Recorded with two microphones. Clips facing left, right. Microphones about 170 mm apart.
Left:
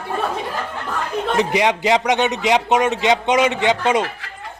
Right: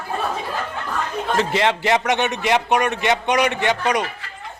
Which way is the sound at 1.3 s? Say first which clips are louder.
Left 1 dB; 15° left (ahead or behind).